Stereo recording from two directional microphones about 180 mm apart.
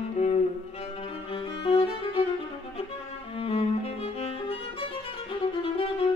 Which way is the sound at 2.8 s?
30° left (ahead or behind).